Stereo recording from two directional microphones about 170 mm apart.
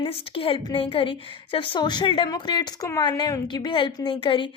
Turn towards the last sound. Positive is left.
turn(degrees=30)  # may be behind; listen again after turning